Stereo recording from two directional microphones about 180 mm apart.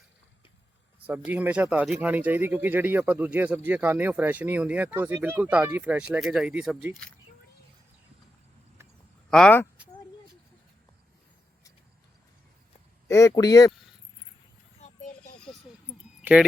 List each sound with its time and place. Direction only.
1.0 s speech: 10° right (ahead or behind)
9.3 s speech: 5° left (ahead or behind)
13.1 s speech: 15° left (ahead or behind)
16.2 s speech: 5° right (ahead or behind)